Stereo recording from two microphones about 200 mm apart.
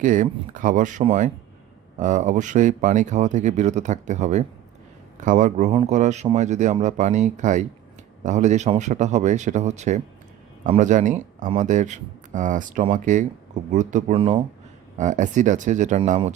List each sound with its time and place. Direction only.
0.0 s speech: 40° right (ahead or behind)
14.2 s speech: 25° right (ahead or behind)
14.9 s speech: 40° right (ahead or behind)